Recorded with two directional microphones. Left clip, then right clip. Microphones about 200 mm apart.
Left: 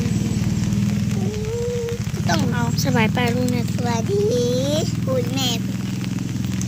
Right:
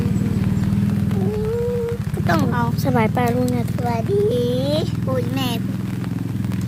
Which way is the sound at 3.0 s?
10° right (ahead or behind).